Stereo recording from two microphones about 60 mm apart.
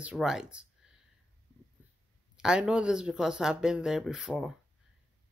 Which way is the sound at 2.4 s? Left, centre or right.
Centre.